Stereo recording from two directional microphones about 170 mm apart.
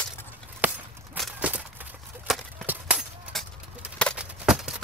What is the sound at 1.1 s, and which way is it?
Walk, centre (ahead or behind).